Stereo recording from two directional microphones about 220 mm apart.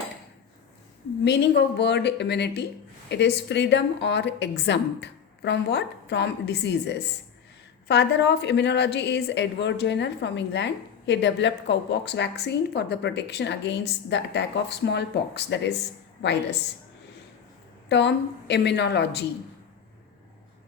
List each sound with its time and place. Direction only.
1.2 s a woman's voice: 50° left (ahead or behind)
17.8 s a woman's voice: 50° left (ahead or behind)